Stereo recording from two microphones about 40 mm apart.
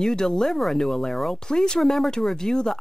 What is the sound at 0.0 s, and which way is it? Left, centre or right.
Speech, centre.